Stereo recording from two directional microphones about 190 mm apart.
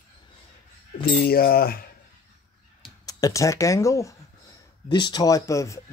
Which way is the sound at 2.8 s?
20° left (ahead or behind).